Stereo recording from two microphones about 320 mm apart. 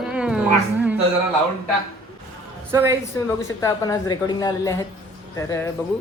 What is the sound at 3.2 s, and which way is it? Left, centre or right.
A woman's voice, centre.